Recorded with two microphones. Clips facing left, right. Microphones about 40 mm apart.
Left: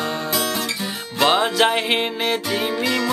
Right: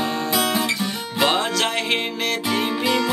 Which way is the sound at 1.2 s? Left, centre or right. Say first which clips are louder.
Left 4 dB; centre.